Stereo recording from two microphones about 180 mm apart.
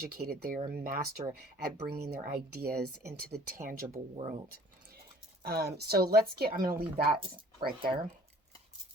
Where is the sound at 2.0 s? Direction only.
60° right (ahead or behind).